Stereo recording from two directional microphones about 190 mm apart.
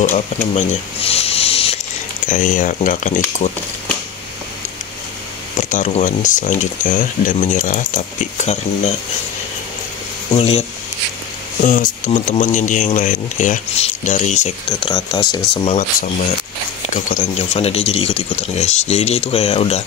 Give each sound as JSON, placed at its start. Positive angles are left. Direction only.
{"t": 0.1, "sound": "snake", "side_deg": 40}
{"t": 2.2, "sound": "speech", "side_deg": 45}
{"t": 5.6, "sound": "speech", "side_deg": 40}
{"t": 11.6, "sound": "speech", "side_deg": 45}
{"t": 16.9, "sound": "speech", "side_deg": 40}